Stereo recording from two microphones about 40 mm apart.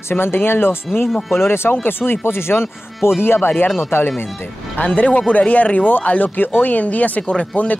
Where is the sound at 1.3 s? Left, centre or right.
Left.